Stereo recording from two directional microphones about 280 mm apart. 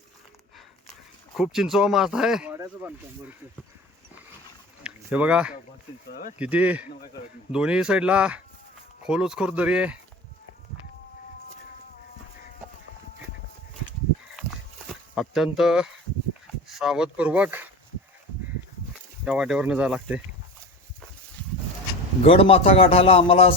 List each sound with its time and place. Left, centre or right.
1.4 s speech: centre
4.8 s a sound: centre
6.4 s speech: centre
15.1 s speech: centre
18.9 s speech: centre
22.3 s speech: centre